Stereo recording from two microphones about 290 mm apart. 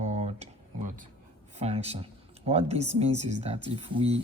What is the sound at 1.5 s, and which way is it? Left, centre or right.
Speech, right.